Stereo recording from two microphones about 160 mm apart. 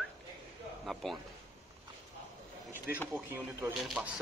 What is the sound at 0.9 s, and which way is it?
Speech, centre (ahead or behind).